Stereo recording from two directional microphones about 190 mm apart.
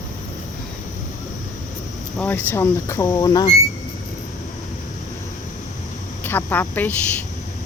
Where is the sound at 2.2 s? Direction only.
10° left (ahead or behind).